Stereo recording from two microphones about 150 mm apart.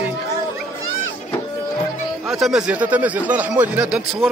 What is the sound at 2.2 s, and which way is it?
Speech, centre (ahead or behind).